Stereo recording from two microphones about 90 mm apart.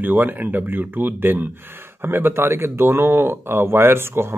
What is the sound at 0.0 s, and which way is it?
Speech, 20° right (ahead or behind).